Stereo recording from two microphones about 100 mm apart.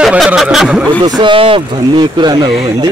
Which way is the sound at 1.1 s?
55° right (ahead or behind).